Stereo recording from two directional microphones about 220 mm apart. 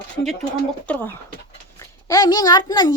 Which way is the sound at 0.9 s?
10° left (ahead or behind).